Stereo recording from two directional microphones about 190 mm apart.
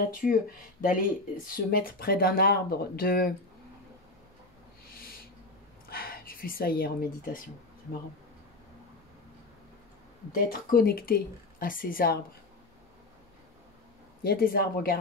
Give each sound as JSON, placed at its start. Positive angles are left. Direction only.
{"t": 0.1, "sound": "speech", "side_deg": 45}
{"t": 5.9, "sound": "a sound", "side_deg": 50}
{"t": 10.3, "sound": "speech", "side_deg": 50}
{"t": 14.2, "sound": "speech", "side_deg": 50}